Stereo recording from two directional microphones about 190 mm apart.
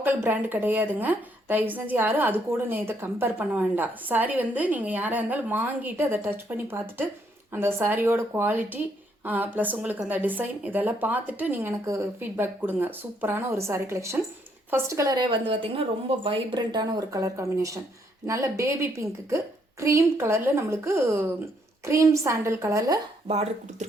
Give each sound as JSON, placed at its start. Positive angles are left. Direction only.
{"t": 0.0, "sound": "a woman's voice", "side_deg": -10}